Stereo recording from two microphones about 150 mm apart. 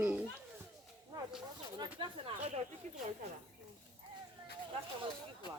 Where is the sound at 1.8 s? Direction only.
35° right (ahead or behind).